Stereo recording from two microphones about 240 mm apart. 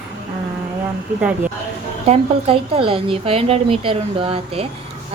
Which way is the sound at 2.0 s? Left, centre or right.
Right.